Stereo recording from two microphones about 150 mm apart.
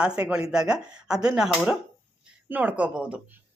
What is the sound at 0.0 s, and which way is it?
Speech, 5° right (ahead or behind).